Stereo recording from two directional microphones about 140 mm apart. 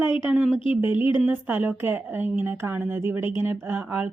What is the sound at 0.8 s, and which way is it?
Speech, 15° right (ahead or behind).